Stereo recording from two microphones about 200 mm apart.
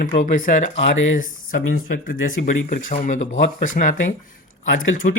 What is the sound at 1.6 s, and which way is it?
Speech, 90° left.